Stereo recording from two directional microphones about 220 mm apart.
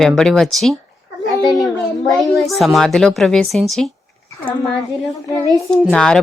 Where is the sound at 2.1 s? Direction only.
Centre (ahead or behind).